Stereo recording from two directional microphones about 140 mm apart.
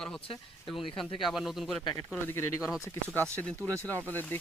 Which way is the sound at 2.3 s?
20° left (ahead or behind).